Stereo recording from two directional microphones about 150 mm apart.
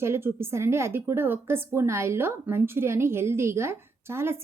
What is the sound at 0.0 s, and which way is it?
A woman's voice, 15° right (ahead or behind).